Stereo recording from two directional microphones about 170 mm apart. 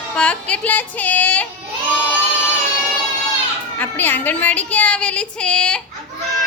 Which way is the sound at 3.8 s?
10° left (ahead or behind).